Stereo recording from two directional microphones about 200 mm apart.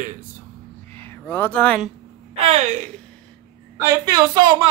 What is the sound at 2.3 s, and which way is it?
Speech, 35° right (ahead or behind).